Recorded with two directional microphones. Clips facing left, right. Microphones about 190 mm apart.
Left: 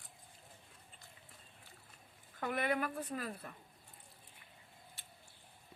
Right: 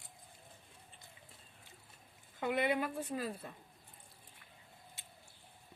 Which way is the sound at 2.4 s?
20° right (ahead or behind).